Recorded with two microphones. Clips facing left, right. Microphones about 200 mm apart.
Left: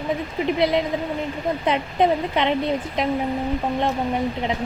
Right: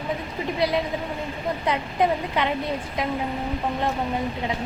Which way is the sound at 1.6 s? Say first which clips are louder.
Left 3 dB; 20° left (ahead or behind).